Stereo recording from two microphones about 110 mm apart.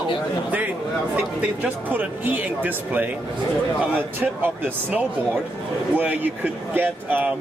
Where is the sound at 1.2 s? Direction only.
10° right (ahead or behind).